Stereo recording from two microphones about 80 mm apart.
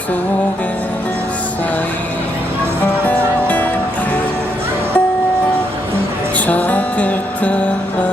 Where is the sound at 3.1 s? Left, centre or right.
Centre.